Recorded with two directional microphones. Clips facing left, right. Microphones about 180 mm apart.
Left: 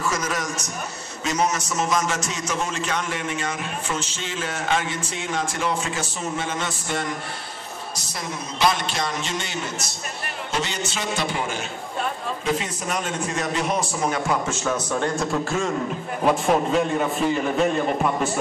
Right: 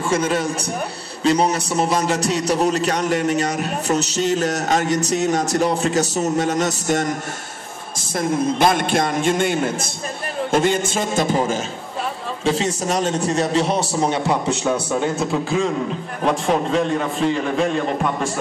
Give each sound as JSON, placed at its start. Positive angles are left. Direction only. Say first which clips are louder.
{"t": 0.0, "sound": "a man's voice", "louder": "right 6 dB", "side_deg": -30}
{"t": 8.0, "sound": "a man's voice", "louder": "right 16 dB", "side_deg": -50}
{"t": 12.8, "sound": "a man's voice", "louder": "right 8 dB", "side_deg": -35}
{"t": 14.6, "sound": "speech", "louder": "right 4 dB", "side_deg": -10}
{"t": 16.2, "sound": "a man's voice", "louder": "even", "side_deg": 5}